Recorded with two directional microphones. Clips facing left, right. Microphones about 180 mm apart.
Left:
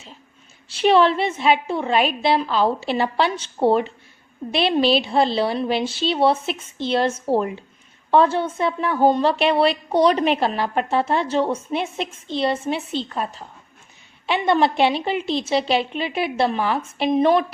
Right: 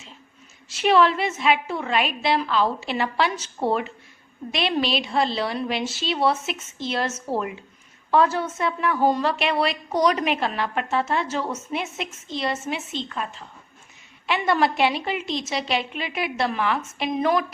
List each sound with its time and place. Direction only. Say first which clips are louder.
0.7 s a woman's voice: left 3 dB; 30° left (ahead or behind)